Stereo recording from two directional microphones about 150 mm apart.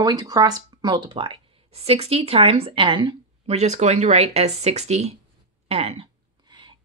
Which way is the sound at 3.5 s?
45° right (ahead or behind).